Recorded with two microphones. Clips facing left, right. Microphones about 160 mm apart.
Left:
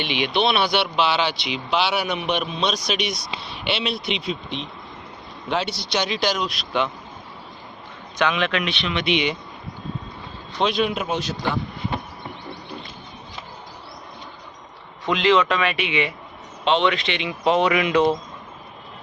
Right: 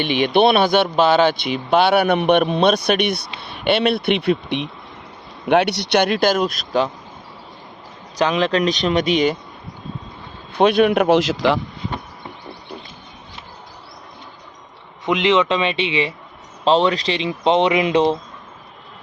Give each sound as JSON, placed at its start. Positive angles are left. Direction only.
{"t": 0.0, "sound": "speech", "side_deg": -45}
{"t": 8.1, "sound": "speech", "side_deg": -35}
{"t": 10.5, "sound": "a man's voice", "side_deg": -55}
{"t": 15.0, "sound": "speech", "side_deg": -20}